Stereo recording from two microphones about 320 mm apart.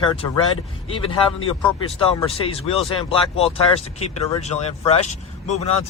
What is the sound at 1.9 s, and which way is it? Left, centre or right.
Speech, centre.